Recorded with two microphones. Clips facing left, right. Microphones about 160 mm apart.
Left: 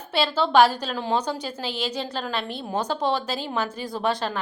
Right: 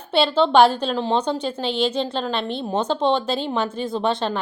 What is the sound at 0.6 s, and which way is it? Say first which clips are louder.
A woman's voice: right 4 dB; 25° right (ahead or behind).